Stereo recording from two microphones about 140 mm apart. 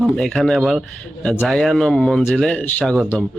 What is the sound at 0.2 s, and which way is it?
A man's voice, 5° left (ahead or behind).